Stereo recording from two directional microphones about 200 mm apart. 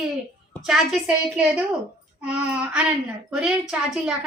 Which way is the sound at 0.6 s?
5° right (ahead or behind).